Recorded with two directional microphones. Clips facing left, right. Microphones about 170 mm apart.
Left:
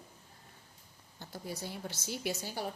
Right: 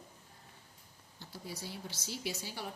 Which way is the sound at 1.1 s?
50° left (ahead or behind).